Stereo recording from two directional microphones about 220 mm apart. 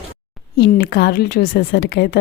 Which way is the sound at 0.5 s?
45° left (ahead or behind).